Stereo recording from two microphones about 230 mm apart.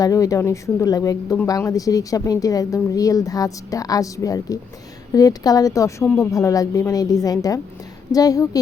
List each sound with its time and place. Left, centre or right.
0.0 s speech: centre